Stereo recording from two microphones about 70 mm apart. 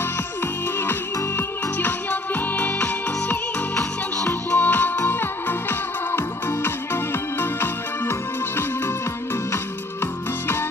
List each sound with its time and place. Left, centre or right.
1.8 s music: left